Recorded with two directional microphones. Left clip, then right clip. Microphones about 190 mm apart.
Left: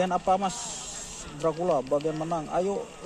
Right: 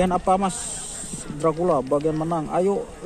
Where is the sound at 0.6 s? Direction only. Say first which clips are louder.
Right 3 dB; 20° left (ahead or behind).